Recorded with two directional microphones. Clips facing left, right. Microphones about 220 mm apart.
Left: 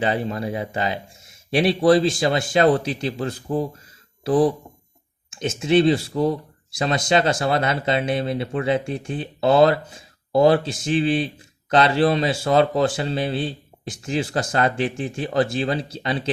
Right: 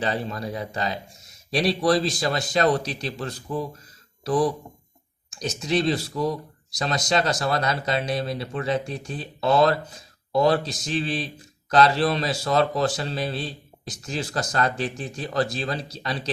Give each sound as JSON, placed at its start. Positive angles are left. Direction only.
{"t": 0.0, "sound": "speech", "side_deg": 25}